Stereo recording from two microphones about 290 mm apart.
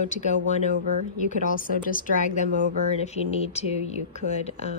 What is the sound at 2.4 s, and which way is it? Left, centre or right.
Speech, right.